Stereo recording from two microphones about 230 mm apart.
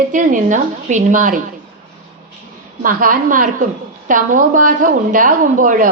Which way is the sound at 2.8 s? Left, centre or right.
Right.